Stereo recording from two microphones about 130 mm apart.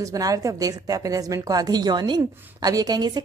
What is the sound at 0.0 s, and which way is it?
A woman's voice, 25° right (ahead or behind).